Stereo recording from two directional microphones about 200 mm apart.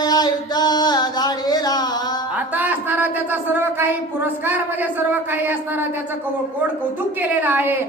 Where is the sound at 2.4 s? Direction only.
10° right (ahead or behind).